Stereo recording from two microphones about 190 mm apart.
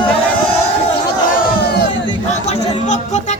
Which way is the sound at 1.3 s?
55° left (ahead or behind).